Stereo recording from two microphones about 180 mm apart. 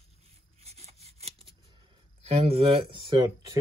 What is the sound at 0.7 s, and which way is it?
Rub, 35° right (ahead or behind).